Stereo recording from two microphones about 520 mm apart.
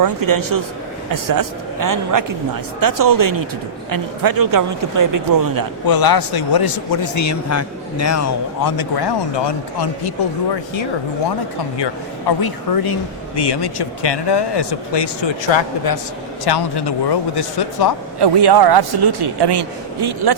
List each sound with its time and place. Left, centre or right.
0.0 s speech: right
5.8 s a man's voice: left
12.4 s speech: left
18.2 s a man's voice: right